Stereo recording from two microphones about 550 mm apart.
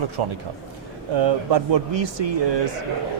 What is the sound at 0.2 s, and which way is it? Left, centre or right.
A man's voice, right.